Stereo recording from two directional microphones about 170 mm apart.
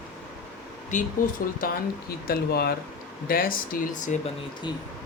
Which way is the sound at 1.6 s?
60° left (ahead or behind).